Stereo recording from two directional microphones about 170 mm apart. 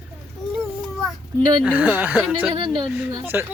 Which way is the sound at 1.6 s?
10° right (ahead or behind).